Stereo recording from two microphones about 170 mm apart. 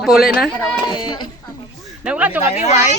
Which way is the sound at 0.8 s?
25° left (ahead or behind).